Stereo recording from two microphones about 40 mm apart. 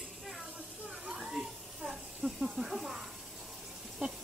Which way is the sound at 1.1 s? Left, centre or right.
Centre.